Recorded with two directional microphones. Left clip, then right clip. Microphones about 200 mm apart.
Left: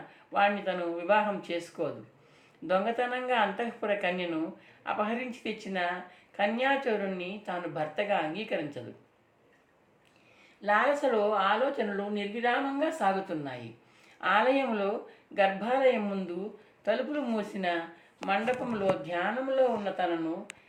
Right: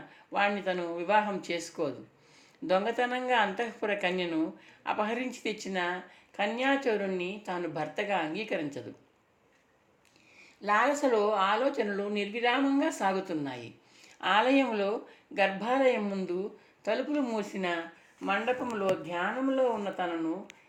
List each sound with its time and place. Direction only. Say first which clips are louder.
0.3 s speech: left 2 dB; 30° right (ahead or behind)
10.6 s speech: even; 35° right (ahead or behind)